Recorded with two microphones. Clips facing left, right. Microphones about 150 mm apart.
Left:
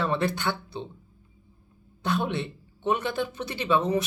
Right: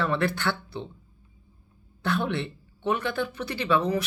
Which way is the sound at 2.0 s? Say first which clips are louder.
Even; 20° left (ahead or behind).